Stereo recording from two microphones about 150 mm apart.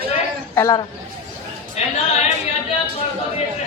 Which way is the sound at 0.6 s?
25° left (ahead or behind).